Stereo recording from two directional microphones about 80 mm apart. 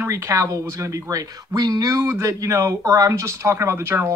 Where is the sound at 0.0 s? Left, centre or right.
Right.